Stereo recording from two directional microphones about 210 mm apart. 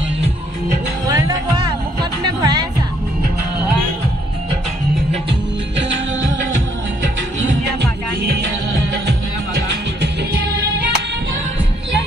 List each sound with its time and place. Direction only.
1.0 s music: 15° right (ahead or behind)
10.0 s music: 50° right (ahead or behind)